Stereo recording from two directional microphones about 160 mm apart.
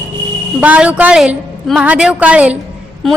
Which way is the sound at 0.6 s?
10° right (ahead or behind).